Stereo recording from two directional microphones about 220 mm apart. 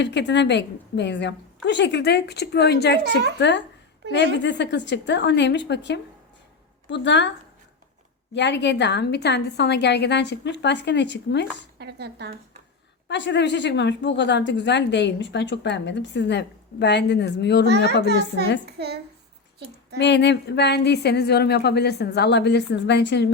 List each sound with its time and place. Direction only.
0.0 s a woman's voice: 50° left (ahead or behind)
11.8 s speech: 50° right (ahead or behind)
13.1 s a woman's voice: 55° left (ahead or behind)
20.0 s a woman's voice: 50° left (ahead or behind)